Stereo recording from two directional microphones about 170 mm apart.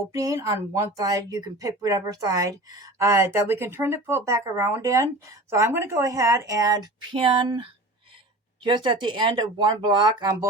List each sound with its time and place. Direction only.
0.1 s speech: 20° right (ahead or behind)